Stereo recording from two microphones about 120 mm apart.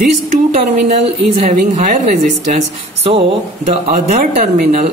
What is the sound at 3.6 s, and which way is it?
A woman's voice, 65° right (ahead or behind).